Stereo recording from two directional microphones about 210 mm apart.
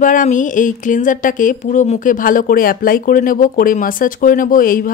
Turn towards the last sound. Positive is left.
turn(degrees=40)  # may be behind; listen again after turning